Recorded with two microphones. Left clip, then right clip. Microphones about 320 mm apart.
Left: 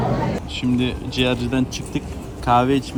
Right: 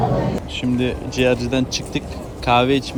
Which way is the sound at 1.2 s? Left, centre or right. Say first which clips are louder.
Right 3 dB; left.